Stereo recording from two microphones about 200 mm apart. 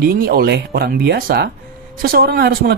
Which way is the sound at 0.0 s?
50° right (ahead or behind).